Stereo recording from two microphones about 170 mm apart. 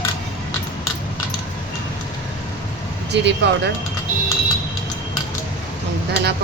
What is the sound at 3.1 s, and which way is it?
Speech, 90° right.